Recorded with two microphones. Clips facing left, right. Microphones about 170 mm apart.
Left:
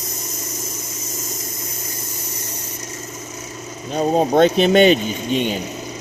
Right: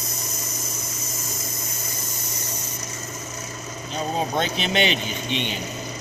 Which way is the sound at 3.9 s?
50° left (ahead or behind).